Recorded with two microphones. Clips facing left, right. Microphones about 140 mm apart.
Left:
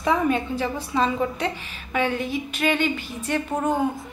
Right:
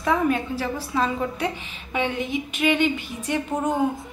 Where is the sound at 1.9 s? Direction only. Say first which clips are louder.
Left 1 dB; 20° right (ahead or behind).